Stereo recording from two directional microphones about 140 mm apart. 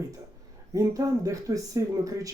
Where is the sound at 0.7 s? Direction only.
25° right (ahead or behind).